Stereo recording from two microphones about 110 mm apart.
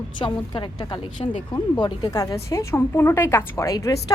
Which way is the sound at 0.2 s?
45° left (ahead or behind).